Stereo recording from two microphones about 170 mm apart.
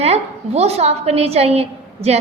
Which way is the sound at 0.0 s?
40° right (ahead or behind).